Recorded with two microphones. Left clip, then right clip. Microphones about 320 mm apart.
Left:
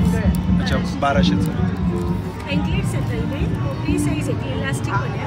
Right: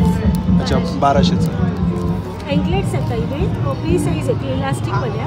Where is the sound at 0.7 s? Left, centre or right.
Centre.